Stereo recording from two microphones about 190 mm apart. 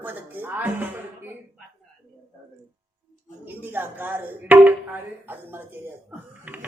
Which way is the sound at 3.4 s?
10° right (ahead or behind).